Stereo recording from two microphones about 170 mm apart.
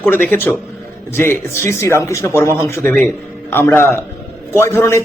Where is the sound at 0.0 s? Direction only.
10° left (ahead or behind).